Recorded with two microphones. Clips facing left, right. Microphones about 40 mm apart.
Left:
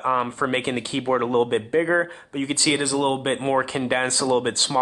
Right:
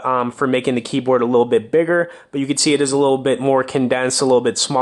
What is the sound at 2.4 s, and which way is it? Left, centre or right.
Speech, left.